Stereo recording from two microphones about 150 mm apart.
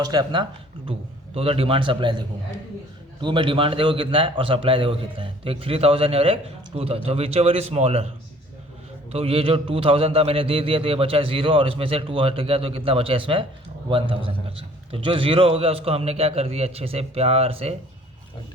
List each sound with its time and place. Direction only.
0.0 s speech: 25° right (ahead or behind)
0.9 s a man's voice: 40° right (ahead or behind)
9.1 s a man's voice: 40° right (ahead or behind)